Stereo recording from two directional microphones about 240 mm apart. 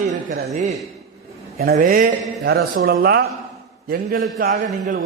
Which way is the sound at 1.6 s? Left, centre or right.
Right.